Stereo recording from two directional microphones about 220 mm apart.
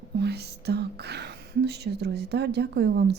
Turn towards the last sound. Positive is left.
turn(degrees=-50)  # may be behind; listen again after turning